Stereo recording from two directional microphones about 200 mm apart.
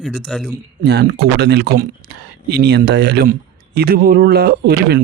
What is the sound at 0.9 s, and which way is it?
Speech, 55° right (ahead or behind).